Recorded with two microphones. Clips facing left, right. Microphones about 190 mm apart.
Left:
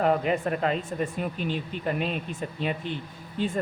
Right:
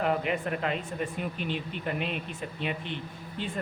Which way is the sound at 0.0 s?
40° left (ahead or behind).